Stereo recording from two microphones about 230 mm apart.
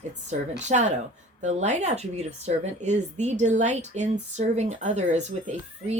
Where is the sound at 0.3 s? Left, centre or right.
Right.